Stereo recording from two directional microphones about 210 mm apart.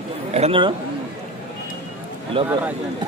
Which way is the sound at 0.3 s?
25° right (ahead or behind).